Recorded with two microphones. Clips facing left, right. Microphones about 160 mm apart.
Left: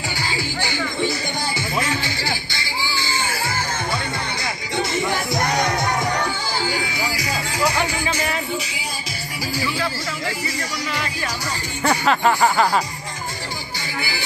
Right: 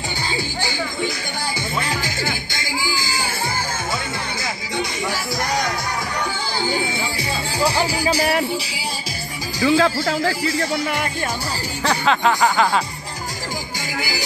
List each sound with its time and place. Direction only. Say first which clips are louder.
1.8 s music: left 1 dB; 40° right (ahead or behind)
6.7 s music: right 2 dB; 25° right (ahead or behind)
9.7 s speech: right 9 dB; 90° right; by 11.1 s 60° right (ahead or behind)
11.8 s speech: left 1 dB; 5° left (ahead or behind)